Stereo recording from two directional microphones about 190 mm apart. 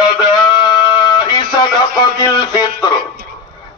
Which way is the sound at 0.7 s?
20° left (ahead or behind).